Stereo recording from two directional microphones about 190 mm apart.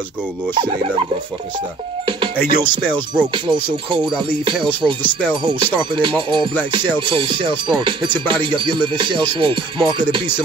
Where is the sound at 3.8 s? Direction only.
25° right (ahead or behind).